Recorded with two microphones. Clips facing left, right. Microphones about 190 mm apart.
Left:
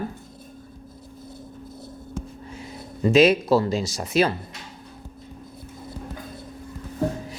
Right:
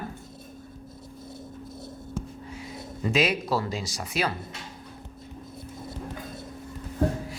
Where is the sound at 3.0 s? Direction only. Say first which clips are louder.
Left 9 dB; 25° left (ahead or behind).